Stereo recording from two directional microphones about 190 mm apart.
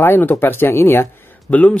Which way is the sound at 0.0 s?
10° left (ahead or behind).